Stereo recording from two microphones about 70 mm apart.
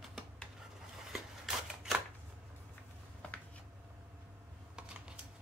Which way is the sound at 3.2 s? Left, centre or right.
Centre.